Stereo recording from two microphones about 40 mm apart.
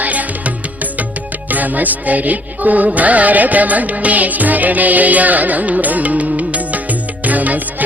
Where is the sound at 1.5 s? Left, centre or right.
Right.